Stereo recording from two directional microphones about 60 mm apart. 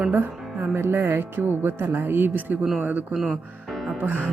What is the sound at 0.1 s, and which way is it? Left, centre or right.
Speech, right.